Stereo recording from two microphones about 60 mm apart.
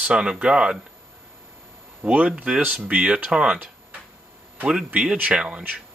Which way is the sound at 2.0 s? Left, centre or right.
Right.